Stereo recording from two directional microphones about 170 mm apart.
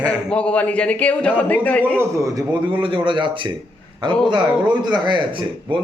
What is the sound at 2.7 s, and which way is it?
Speech, 30° right (ahead or behind).